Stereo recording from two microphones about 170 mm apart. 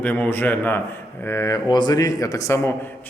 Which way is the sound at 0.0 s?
10° left (ahead or behind).